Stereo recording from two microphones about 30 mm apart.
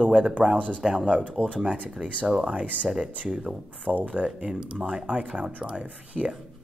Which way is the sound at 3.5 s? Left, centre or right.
Right.